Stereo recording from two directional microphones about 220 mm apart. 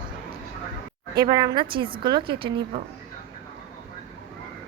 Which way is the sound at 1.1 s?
20° right (ahead or behind).